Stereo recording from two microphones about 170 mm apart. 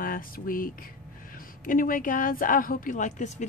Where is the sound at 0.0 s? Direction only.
55° left (ahead or behind).